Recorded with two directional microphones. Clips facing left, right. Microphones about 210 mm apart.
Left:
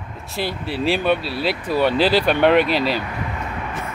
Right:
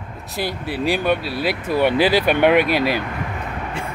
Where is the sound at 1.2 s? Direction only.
50° right (ahead or behind).